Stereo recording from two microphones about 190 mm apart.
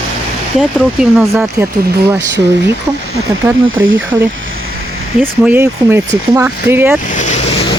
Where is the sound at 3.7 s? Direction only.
90° right.